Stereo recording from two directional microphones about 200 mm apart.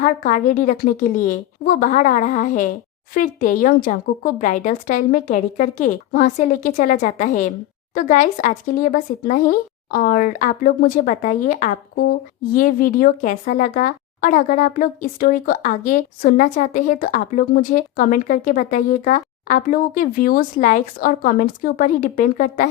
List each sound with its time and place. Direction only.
0.0 s a woman's voice: 40° left (ahead or behind)